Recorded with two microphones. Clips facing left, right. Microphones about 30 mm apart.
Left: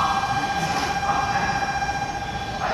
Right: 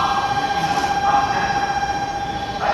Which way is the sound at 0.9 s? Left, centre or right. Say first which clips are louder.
Right 5 dB; centre.